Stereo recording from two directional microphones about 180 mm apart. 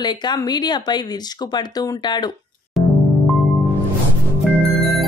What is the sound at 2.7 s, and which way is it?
Music, centre (ahead or behind).